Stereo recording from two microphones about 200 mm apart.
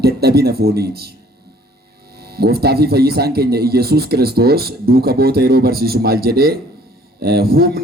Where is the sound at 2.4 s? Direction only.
55° right (ahead or behind).